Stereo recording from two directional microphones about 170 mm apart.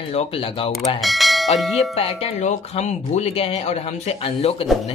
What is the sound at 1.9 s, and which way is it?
Speech, 35° left (ahead or behind).